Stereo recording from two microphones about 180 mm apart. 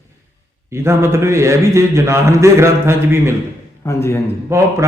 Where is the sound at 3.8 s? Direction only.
15° left (ahead or behind).